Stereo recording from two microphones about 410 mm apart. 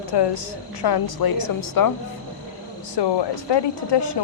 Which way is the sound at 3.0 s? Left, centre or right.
Left.